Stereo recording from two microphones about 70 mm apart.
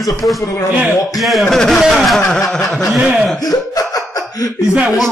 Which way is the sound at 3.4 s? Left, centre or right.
Left.